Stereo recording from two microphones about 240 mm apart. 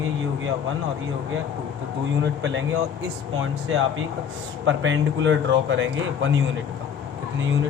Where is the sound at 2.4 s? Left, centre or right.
Right.